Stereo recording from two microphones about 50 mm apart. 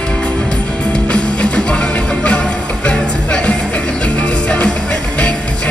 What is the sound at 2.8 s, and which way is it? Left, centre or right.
Music, left.